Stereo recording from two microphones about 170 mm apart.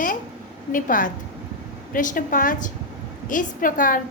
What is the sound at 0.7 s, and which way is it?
A woman's voice, 50° left (ahead or behind).